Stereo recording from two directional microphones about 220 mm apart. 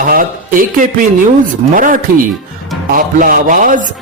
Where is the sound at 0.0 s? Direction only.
40° right (ahead or behind).